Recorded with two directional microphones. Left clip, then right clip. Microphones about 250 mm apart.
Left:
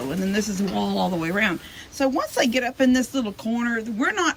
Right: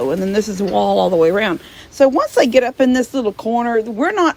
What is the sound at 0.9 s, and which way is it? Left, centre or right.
Speech, centre.